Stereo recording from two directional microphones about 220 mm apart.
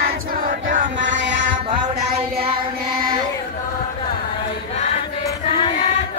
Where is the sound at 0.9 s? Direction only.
55° right (ahead or behind).